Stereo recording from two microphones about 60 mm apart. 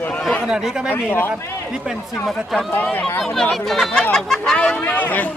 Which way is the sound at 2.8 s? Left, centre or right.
Left.